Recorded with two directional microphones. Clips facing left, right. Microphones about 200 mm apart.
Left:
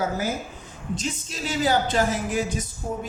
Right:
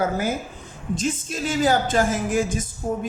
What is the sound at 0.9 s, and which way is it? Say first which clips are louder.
Speech: right 5 dB; 50° right (ahead or behind).